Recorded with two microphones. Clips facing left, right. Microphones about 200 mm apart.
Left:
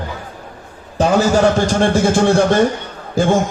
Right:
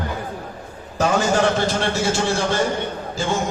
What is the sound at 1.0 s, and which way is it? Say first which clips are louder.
A man's voice: left 5 dB; 40° left (ahead or behind).